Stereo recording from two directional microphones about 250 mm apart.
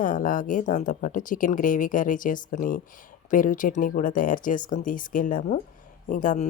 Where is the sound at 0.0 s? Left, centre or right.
Left.